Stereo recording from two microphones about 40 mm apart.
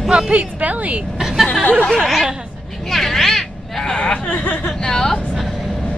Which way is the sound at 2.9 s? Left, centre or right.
Centre.